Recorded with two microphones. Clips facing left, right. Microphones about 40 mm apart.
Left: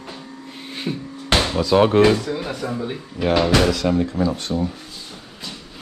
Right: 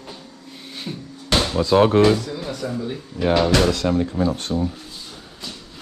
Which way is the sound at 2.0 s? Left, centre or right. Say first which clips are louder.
Left 1 dB; left.